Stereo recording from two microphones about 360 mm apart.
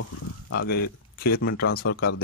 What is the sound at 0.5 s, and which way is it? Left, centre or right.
Speech, left.